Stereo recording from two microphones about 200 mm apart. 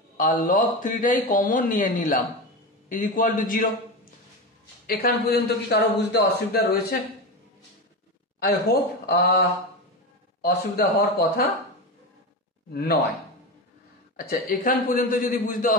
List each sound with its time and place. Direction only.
0.2 s a man's voice: 40° left (ahead or behind)
4.8 s a man's voice: 50° left (ahead or behind)
8.4 s a man's voice: 50° left (ahead or behind)
10.4 s a man's voice: 50° left (ahead or behind)
12.7 s a man's voice: 55° left (ahead or behind)
14.2 s a man's voice: 45° left (ahead or behind)